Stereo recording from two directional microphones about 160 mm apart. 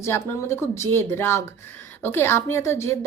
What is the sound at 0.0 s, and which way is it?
A woman's voice, 15° left (ahead or behind).